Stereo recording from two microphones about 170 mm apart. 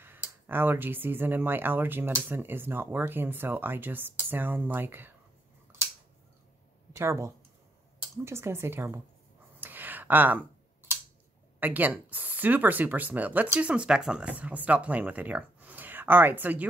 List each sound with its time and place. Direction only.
0.0 s speech: 10° right (ahead or behind)
6.9 s speech: 15° right (ahead or behind)
9.6 s a sound: 10° right (ahead or behind)
11.6 s speech: 10° right (ahead or behind)